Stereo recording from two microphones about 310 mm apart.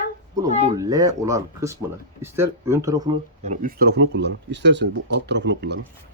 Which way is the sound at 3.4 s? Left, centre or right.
Right.